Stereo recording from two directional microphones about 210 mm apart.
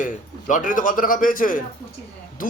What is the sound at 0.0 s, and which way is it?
Speech, 40° left (ahead or behind).